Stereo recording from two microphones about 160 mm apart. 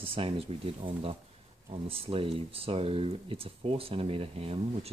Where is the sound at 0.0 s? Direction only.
35° right (ahead or behind).